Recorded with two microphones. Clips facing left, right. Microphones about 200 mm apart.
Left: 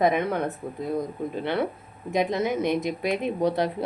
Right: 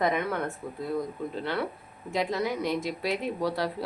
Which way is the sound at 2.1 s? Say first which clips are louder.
Left 4 dB; 20° left (ahead or behind).